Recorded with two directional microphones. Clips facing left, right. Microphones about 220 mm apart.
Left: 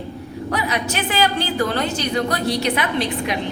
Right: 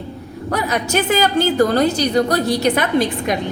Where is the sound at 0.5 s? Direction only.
45° right (ahead or behind).